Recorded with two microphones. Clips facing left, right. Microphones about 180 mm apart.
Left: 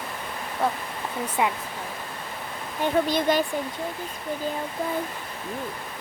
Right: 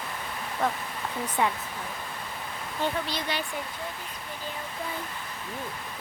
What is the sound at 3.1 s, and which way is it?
Speech, 45° left (ahead or behind).